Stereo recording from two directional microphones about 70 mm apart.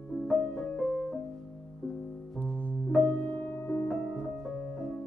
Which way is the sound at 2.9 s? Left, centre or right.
Centre.